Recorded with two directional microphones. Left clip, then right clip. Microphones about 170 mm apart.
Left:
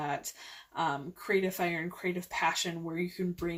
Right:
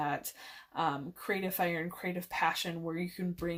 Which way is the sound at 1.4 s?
30° right (ahead or behind).